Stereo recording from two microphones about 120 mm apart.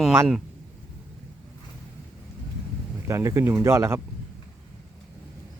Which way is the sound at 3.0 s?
25° right (ahead or behind).